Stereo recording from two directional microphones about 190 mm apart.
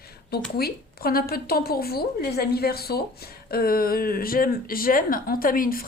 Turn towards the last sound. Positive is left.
turn(degrees=50)  # may be behind; listen again after turning